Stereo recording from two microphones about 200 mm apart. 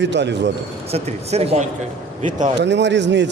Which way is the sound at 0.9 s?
30° right (ahead or behind).